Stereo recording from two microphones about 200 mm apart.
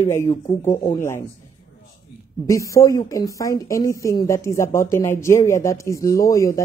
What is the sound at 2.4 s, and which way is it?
Speech, 15° left (ahead or behind).